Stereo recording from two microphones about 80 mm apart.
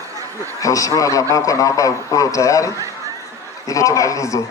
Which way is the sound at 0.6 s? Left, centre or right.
Left.